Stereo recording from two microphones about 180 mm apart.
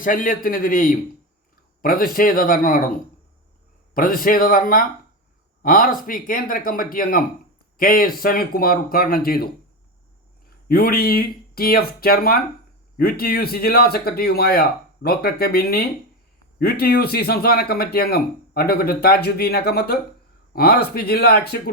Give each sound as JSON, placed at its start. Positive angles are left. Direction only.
{"t": 0.0, "sound": "speech", "side_deg": 50}
{"t": 3.9, "sound": "speech", "side_deg": 50}
{"t": 10.7, "sound": "speech", "side_deg": 55}